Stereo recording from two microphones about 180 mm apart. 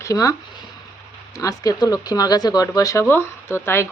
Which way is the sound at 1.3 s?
20° left (ahead or behind).